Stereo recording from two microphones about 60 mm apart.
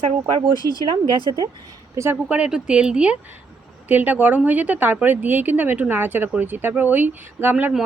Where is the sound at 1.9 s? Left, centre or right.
Right.